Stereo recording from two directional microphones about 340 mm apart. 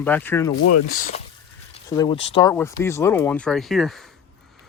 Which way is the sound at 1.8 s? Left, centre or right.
Centre.